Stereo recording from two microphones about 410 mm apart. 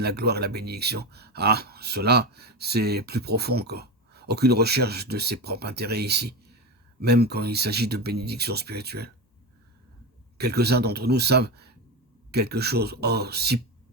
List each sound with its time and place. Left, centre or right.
0.0 s speech: right
10.3 s speech: right